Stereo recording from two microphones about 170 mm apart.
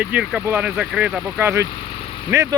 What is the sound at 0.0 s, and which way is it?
Speech, 10° right (ahead or behind).